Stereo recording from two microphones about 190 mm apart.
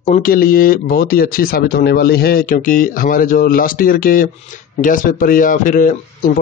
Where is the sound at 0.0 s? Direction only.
45° left (ahead or behind).